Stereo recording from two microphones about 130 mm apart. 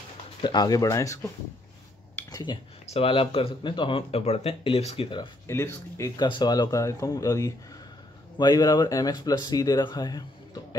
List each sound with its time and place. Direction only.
0.4 s speech: 35° left (ahead or behind)
2.3 s speech: 35° left (ahead or behind)
2.9 s speech: 45° left (ahead or behind)
5.5 s speech: 20° left (ahead or behind)
6.2 s speech: 35° left (ahead or behind)